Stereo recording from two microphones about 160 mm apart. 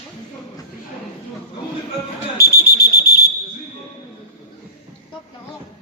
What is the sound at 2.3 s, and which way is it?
Smoke detector, 70° left (ahead or behind).